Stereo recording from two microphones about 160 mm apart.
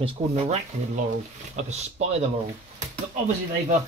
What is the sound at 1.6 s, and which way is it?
Speech, 45° right (ahead or behind).